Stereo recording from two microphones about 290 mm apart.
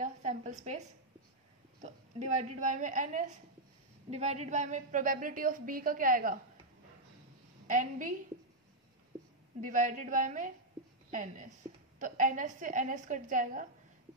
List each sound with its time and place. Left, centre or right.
0.0 s a sound: right
1.8 s a woman's voice: right
7.6 s a woman's voice: right
9.6 s a woman's voice: right